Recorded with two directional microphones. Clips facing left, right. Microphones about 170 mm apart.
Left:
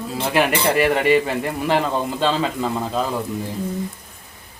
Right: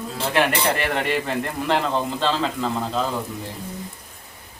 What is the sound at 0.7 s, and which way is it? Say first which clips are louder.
Speech: left 7 dB; 5° left (ahead or behind).